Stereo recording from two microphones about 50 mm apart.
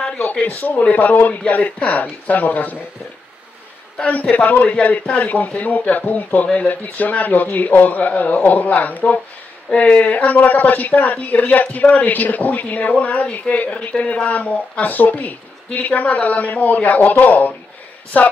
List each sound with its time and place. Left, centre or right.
0.6 s a man's voice: left
4.0 s a man's voice: left